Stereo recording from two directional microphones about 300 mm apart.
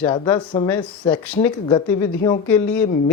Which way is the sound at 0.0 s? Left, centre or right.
Centre.